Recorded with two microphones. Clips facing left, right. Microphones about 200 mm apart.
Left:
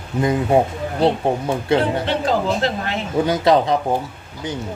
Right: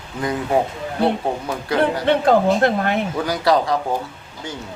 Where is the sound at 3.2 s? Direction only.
20° left (ahead or behind).